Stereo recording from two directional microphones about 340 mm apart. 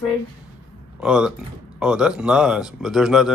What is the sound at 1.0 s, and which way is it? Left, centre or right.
Speech, centre.